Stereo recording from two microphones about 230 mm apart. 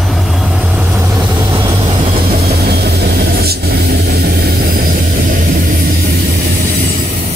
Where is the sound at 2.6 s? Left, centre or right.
Right.